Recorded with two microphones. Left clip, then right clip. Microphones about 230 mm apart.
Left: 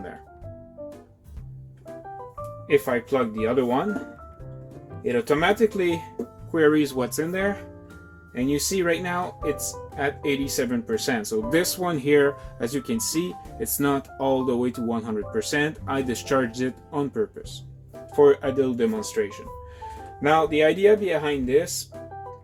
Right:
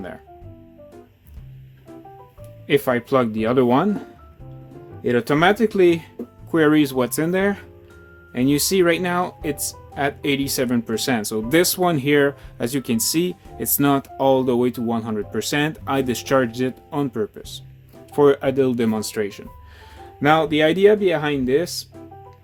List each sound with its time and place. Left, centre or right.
2.6 s speech: right
5.0 s speech: right